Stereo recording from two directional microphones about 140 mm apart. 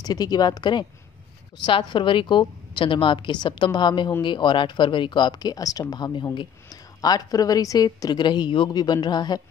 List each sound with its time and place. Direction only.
0.0 s speech: 30° left (ahead or behind)